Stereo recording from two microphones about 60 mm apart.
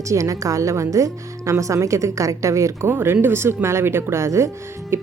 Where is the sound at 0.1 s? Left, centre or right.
Right.